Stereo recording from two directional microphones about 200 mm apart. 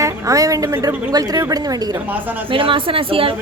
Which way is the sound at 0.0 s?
15° right (ahead or behind).